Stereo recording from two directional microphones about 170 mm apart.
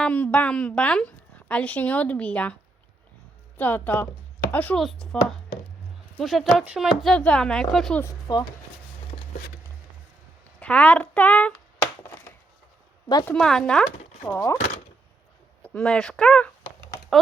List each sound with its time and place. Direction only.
0.0 s a woman's voice: 10° left (ahead or behind)
3.6 s a woman's voice: 10° left (ahead or behind)
8.0 s speech: 25° left (ahead or behind)
10.6 s a woman's voice: 10° left (ahead or behind)
13.2 s speech: 5° left (ahead or behind)
14.3 s speech: 20° left (ahead or behind)
15.6 s speech: 5° left (ahead or behind)